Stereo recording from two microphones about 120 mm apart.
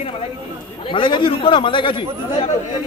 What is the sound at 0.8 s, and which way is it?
A man's voice, 45° left (ahead or behind).